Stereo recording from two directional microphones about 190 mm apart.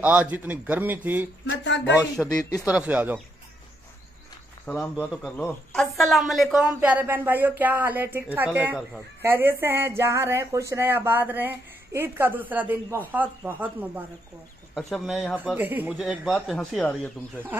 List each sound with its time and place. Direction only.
0.0 s speech: 10° right (ahead or behind)
1.4 s a sound: 70° left (ahead or behind)
2.2 s a man's voice: 5° left (ahead or behind)
2.6 s speech: 5° right (ahead or behind)
4.6 s a man's voice: 10° left (ahead or behind)